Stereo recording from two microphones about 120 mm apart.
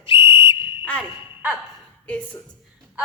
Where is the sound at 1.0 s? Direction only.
15° right (ahead or behind).